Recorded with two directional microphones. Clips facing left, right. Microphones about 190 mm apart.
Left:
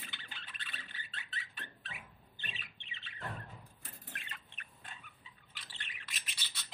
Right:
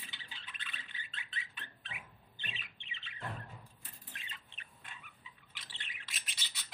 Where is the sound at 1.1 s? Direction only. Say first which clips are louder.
Even; 40° left (ahead or behind).